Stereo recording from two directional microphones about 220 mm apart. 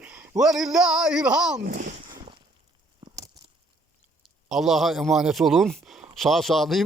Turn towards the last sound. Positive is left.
turn(degrees=0)  # may be behind; listen again after turning